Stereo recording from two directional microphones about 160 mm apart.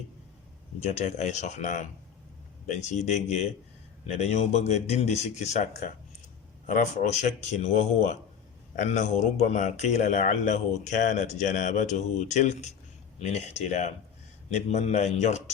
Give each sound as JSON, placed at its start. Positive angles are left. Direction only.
{"t": 0.8, "sound": "a man's voice", "side_deg": 40}